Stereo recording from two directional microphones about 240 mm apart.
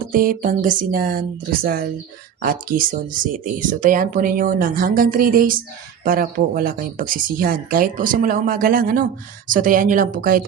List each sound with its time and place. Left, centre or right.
0.1 s speech: right